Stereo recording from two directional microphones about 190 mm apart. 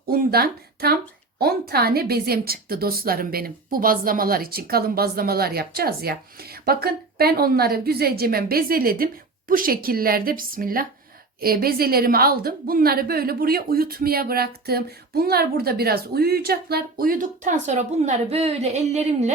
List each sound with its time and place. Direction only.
0.1 s a woman's voice: 50° right (ahead or behind); by 19.3 s 35° right (ahead or behind)